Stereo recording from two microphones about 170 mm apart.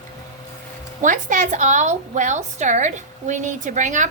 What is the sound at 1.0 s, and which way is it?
A woman's voice, 50° right (ahead or behind).